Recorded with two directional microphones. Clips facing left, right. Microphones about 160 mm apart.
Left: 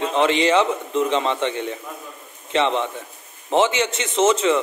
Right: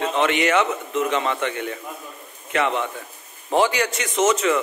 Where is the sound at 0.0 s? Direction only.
30° left (ahead or behind).